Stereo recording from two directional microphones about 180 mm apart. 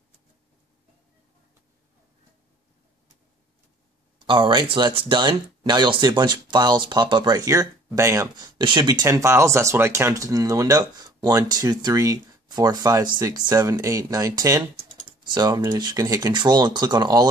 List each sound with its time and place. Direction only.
4.3 s speech: 25° right (ahead or behind)